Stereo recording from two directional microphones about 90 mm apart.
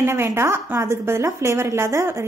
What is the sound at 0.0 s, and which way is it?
A woman's voice, 30° right (ahead or behind).